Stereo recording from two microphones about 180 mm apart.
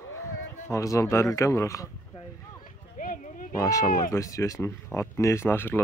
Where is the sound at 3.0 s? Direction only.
50° left (ahead or behind).